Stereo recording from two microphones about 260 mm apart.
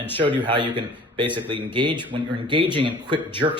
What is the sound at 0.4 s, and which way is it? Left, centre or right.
Speech, centre.